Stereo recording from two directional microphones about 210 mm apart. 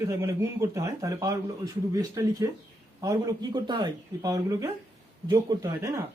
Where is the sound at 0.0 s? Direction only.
10° right (ahead or behind).